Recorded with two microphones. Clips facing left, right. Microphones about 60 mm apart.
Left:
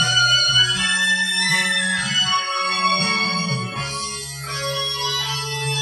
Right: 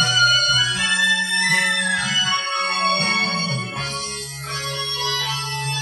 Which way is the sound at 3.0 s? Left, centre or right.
Right.